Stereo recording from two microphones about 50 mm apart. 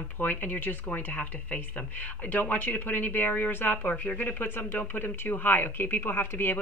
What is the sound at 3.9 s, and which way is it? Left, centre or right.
Speech, left.